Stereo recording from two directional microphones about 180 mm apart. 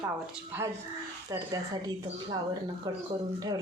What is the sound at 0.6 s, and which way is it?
Speech, 15° right (ahead or behind).